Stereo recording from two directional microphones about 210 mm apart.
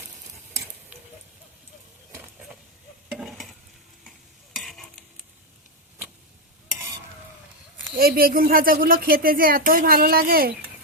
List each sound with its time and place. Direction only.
3.1 s stir: centre (ahead or behind)
4.5 s stir: centre (ahead or behind)
7.9 s speech: 45° right (ahead or behind)